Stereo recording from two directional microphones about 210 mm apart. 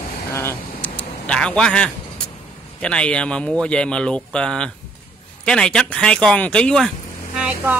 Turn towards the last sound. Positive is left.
turn(degrees=-5)  # may be behind; listen again after turning